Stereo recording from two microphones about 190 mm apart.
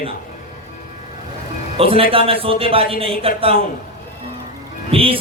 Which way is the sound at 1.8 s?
30° right (ahead or behind).